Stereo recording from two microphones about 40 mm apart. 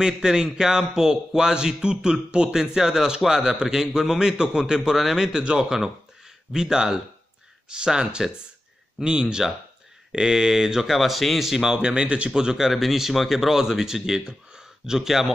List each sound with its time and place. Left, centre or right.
0.0 s a man's voice: centre
10.9 s speech: centre
11.8 s speech: right
12.3 s a man's voice: centre